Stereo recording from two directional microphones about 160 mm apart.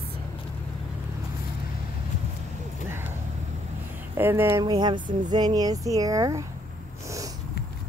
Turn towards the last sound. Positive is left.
turn(degrees=-20)  # may be behind; listen again after turning